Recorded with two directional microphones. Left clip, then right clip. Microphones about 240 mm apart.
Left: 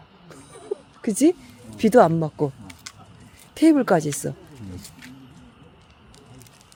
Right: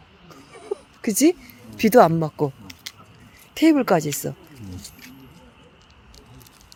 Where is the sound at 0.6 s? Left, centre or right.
Centre.